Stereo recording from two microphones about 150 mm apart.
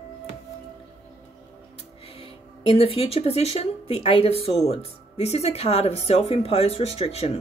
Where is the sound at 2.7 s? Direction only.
40° left (ahead or behind).